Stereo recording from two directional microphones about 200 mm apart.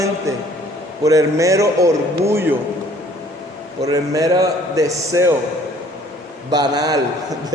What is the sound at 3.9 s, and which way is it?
A man's voice, 15° right (ahead or behind).